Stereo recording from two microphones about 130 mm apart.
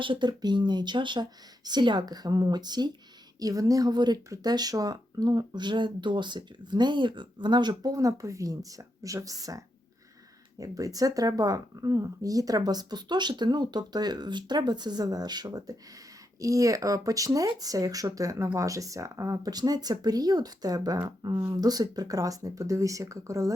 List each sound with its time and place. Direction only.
0.0 s speech: 40° right (ahead or behind)